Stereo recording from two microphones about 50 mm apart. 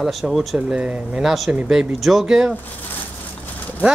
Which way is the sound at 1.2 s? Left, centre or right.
Centre.